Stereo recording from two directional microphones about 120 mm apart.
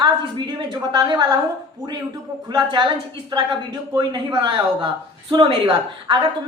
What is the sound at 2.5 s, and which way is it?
A woman's voice, 40° right (ahead or behind).